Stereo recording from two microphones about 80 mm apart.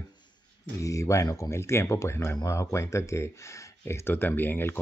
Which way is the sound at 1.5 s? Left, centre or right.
Left.